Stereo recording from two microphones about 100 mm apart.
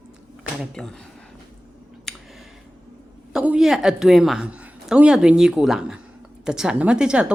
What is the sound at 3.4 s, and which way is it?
A woman's voice, 5° right (ahead or behind).